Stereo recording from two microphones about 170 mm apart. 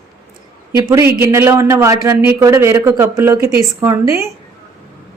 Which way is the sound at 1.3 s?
15° right (ahead or behind).